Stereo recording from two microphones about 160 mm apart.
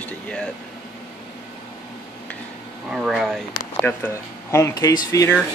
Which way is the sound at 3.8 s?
15° left (ahead or behind).